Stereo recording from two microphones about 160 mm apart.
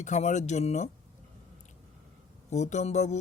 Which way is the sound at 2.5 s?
45° left (ahead or behind).